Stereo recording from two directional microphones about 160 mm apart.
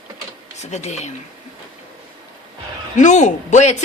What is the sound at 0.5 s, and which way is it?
Speech, 45° left (ahead or behind).